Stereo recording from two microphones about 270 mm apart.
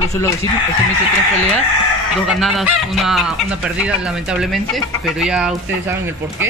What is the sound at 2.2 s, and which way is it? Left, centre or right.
Speech, centre.